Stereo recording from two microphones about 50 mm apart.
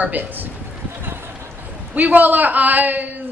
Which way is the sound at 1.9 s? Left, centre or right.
Right.